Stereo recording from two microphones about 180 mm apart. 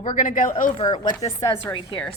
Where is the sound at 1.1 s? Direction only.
20° left (ahead or behind).